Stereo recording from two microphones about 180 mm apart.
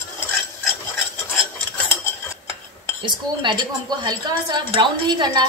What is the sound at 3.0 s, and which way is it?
Speech, 25° right (ahead or behind).